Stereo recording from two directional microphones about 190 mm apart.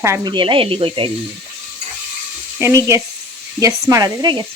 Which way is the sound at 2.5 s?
15° right (ahead or behind).